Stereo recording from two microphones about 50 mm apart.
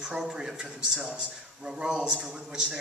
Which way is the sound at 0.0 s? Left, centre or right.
Centre.